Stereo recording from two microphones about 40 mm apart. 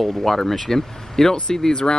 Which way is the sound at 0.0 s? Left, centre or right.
Centre.